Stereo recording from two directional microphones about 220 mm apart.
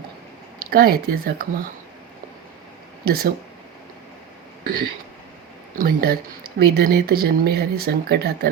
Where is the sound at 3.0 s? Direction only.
45° right (ahead or behind).